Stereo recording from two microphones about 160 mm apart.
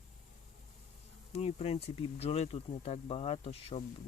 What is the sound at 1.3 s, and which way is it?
Speech, 40° left (ahead or behind).